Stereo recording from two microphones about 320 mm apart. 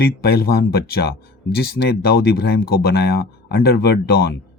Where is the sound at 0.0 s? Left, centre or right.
Left.